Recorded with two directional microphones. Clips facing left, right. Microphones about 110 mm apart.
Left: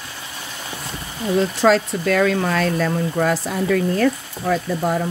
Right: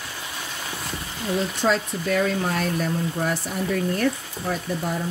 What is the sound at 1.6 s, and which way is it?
Speech, 90° left.